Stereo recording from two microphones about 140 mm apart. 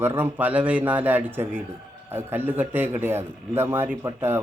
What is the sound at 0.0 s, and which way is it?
A man's voice, 15° right (ahead or behind).